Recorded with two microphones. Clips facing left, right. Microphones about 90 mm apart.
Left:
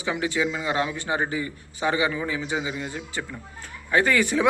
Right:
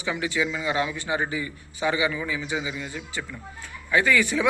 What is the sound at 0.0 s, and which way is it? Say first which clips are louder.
A man's voice: left 1 dB; 30° left (ahead or behind).